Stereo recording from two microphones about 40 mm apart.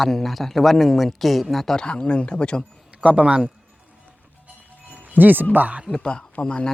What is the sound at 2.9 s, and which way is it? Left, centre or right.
Speech, right.